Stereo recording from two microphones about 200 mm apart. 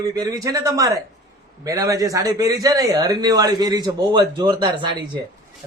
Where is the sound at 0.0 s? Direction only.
15° right (ahead or behind).